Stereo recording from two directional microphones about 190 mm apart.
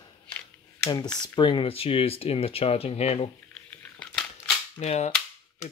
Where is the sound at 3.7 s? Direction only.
5° left (ahead or behind).